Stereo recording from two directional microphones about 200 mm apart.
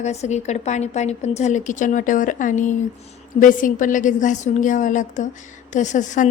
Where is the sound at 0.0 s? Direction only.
35° left (ahead or behind).